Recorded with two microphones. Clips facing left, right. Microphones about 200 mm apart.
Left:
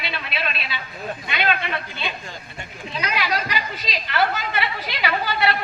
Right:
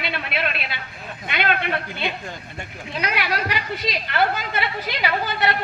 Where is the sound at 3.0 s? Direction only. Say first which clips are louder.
Even; 60° right (ahead or behind).